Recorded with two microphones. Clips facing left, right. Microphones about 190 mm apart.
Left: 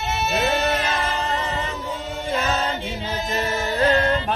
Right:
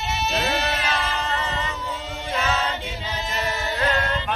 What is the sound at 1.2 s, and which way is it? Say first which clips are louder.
Music: left 2 dB; 35° left (ahead or behind).